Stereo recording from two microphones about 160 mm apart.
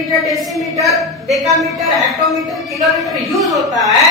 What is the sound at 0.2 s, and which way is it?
Speech, centre (ahead or behind).